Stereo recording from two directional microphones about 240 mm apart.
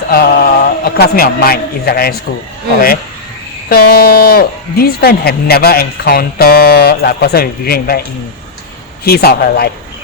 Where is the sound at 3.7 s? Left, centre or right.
Left.